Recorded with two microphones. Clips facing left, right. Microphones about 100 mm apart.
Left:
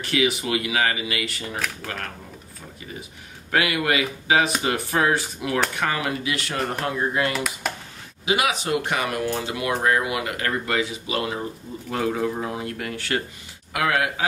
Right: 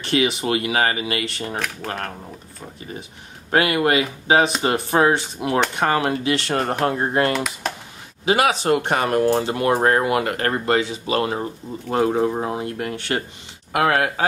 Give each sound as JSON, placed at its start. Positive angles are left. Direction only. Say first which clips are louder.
{"t": 0.0, "sound": "speech", "louder": "right 2 dB", "side_deg": -30}
{"t": 3.5, "sound": "speech", "louder": "right 4 dB", "side_deg": -35}
{"t": 7.3, "sound": "speech", "louder": "right 2 dB", "side_deg": 0}
{"t": 8.3, "sound": "speech", "louder": "right 5 dB", "side_deg": -45}
{"t": 13.7, "sound": "speech", "louder": "right 4 dB", "side_deg": -40}